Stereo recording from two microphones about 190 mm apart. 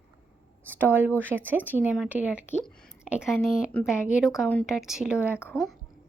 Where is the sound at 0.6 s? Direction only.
10° right (ahead or behind).